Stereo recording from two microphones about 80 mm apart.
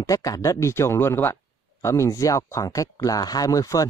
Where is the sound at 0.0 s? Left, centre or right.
Left.